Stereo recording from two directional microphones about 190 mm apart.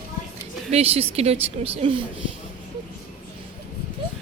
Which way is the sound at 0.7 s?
30° right (ahead or behind).